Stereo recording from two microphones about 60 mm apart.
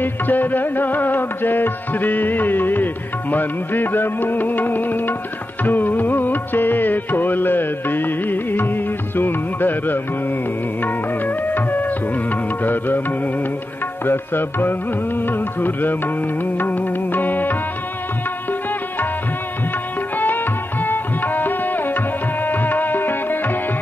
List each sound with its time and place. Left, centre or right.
0.0 s music: left
14.0 s music: left
20.2 s music: left